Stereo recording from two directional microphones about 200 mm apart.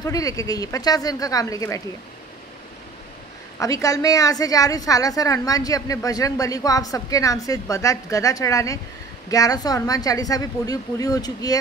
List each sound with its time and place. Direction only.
0.0 s a woman's voice: 15° left (ahead or behind)
3.5 s a woman's voice: 15° left (ahead or behind)